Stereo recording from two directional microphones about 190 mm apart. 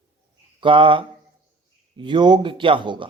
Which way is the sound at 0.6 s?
25° right (ahead or behind).